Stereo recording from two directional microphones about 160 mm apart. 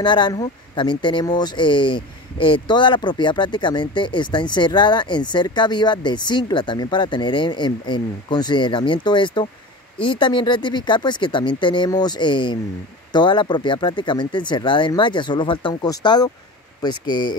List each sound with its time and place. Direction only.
0.0 s speech: 30° left (ahead or behind)